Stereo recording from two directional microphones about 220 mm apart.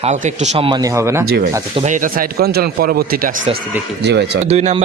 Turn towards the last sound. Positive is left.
turn(degrees=-30)  # may be behind; listen again after turning